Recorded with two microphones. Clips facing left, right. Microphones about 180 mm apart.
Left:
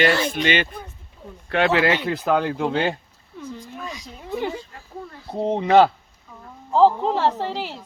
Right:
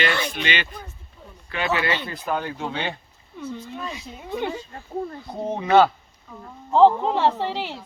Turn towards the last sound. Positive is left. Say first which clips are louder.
# even
turn(degrees=0)  # may be behind; listen again after turning